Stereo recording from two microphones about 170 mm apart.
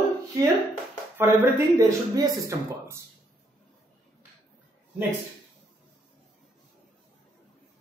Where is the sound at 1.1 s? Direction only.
15° right (ahead or behind).